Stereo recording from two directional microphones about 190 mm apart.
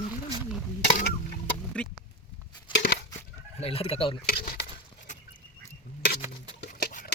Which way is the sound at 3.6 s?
30° left (ahead or behind).